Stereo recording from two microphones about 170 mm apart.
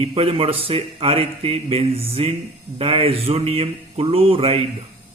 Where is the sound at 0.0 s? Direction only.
35° right (ahead or behind).